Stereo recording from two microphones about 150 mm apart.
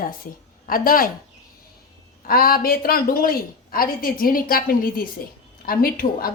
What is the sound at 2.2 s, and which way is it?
A woman's voice, 80° left.